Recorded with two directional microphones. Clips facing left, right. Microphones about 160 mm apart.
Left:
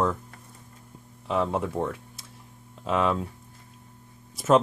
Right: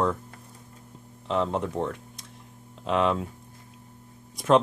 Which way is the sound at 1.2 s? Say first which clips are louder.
Even; 10° left (ahead or behind).